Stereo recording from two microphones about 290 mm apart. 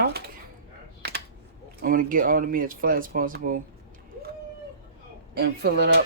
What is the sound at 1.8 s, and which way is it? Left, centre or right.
Speech, right.